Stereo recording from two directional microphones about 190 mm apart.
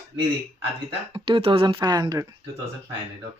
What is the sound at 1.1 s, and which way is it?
Speech, 25° right (ahead or behind).